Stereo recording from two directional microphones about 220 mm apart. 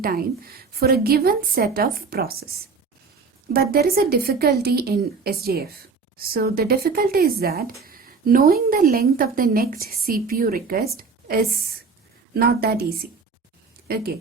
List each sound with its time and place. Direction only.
0.0 s a woman's voice: 40° right (ahead or behind)
3.5 s a woman's voice: 45° right (ahead or behind)